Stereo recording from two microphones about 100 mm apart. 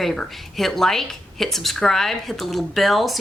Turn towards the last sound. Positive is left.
turn(degrees=0)  # may be behind; listen again after turning